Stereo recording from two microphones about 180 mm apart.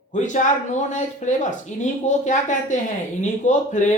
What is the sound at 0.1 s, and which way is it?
Speech, 40° left (ahead or behind).